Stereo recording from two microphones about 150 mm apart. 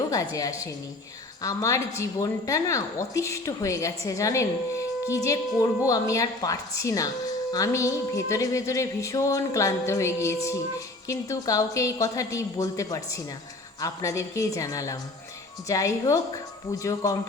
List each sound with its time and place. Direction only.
0.3 s a woman's voice: 20° left (ahead or behind)